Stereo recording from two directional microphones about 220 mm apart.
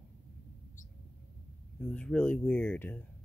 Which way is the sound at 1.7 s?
5° left (ahead or behind).